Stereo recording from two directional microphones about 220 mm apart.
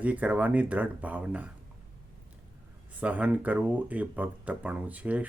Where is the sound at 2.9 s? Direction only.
5° right (ahead or behind).